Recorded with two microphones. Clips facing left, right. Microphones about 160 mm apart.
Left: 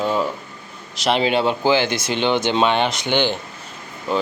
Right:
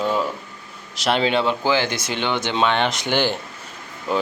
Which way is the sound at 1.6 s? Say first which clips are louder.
Left 3 dB; 25° left (ahead or behind).